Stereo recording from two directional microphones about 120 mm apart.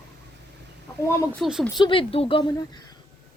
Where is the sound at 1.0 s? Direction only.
20° left (ahead or behind).